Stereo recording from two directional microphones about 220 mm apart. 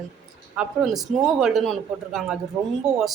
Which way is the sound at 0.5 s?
5° right (ahead or behind).